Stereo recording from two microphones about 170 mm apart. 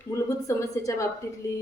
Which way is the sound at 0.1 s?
15° left (ahead or behind).